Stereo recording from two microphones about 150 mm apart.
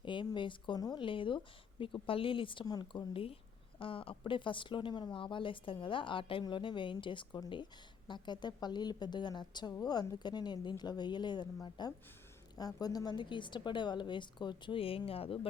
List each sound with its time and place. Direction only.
0.0 s speech: 30° left (ahead or behind)